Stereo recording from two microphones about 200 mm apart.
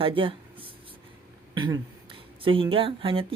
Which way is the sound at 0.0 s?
25° right (ahead or behind).